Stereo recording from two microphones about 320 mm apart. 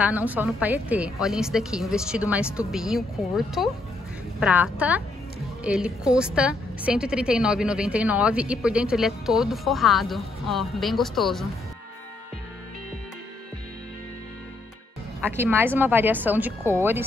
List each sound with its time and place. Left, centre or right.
0.0 s a woman's voice: centre
15.1 s a woman's voice: centre